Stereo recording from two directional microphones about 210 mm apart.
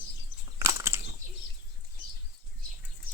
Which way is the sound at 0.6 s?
10° right (ahead or behind).